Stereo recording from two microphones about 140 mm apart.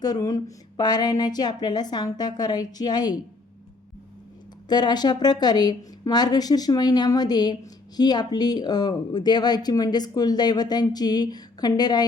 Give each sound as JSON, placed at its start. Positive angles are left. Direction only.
{"t": 0.0, "sound": "speech", "side_deg": 25}
{"t": 4.7, "sound": "speech", "side_deg": 30}